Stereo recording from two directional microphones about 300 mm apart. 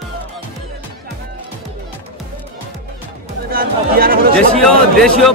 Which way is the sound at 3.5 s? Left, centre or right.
Right.